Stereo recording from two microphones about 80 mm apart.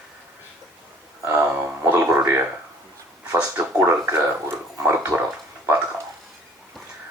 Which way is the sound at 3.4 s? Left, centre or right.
Right.